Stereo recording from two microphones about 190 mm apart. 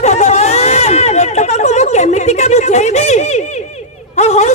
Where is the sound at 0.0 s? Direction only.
35° left (ahead or behind).